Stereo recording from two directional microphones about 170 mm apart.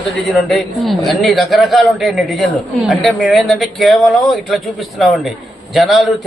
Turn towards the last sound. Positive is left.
turn(degrees=0)  # may be behind; listen again after turning